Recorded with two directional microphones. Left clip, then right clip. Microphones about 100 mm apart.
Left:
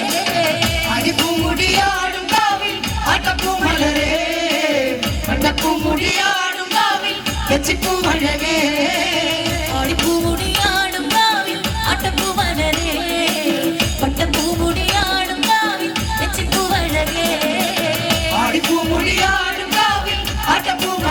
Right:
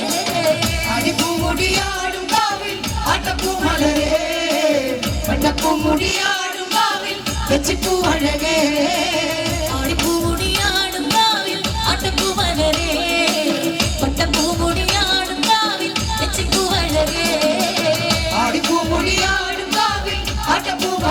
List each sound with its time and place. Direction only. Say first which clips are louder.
3.1 s music: left 3 dB; 20° left (ahead or behind)
8.0 s music: even; 20° left (ahead or behind)
10.5 s music: left 3 dB; 20° left (ahead or behind)
18.3 s music: even; 15° left (ahead or behind)